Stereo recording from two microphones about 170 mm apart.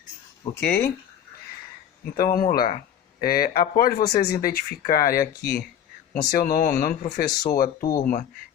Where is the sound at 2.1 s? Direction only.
60° left (ahead or behind).